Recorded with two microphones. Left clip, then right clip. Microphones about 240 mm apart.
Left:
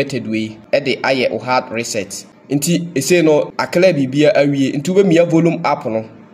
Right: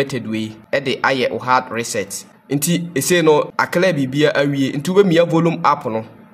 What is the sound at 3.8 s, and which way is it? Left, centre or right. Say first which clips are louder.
Speech: left 4 dB; right.